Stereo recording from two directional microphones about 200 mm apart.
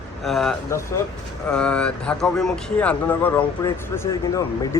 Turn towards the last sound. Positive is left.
turn(degrees=15)  # may be behind; listen again after turning